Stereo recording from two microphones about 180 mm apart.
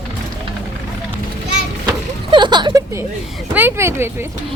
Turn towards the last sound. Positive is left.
turn(degrees=-15)  # may be behind; listen again after turning